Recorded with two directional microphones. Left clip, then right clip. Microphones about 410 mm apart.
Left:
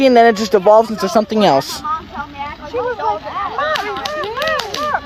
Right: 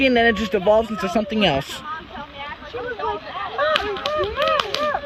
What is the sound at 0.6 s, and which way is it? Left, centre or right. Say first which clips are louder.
Speech: left 7 dB; left.